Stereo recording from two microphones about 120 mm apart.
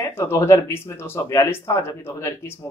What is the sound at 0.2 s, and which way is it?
Speech, 20° left (ahead or behind).